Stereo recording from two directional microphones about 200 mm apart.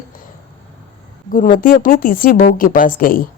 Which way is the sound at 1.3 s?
45° left (ahead or behind).